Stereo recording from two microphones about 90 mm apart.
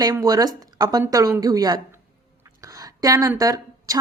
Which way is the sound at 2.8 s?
45° right (ahead or behind).